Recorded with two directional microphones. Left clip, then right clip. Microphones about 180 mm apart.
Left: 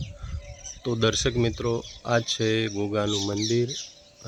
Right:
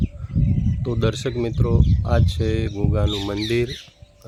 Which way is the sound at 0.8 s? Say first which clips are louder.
Left 1 dB; 10° right (ahead or behind).